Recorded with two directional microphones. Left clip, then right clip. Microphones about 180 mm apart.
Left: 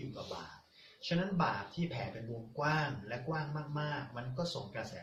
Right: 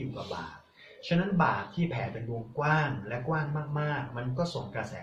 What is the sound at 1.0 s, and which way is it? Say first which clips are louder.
Speech: right 7 dB; 10° right (ahead or behind).